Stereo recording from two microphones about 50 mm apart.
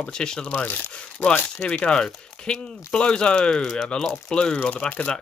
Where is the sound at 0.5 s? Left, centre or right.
Left.